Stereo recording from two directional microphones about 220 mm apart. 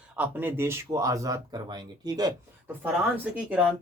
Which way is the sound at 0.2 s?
10° right (ahead or behind).